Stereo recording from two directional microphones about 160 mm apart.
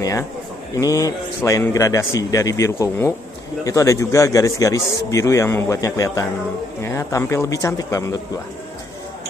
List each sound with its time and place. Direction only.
0.7 s a man's voice: 20° left (ahead or behind)